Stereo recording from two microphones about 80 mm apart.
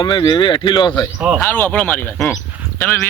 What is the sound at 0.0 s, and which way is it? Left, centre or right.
Speech, left.